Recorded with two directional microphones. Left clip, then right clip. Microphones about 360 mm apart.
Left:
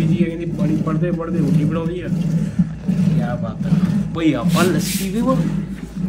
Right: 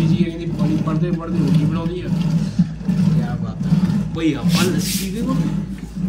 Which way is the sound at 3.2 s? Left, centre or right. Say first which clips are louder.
Left 3 dB; centre.